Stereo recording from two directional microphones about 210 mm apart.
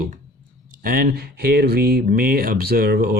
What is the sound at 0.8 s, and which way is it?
Speech, 45° right (ahead or behind).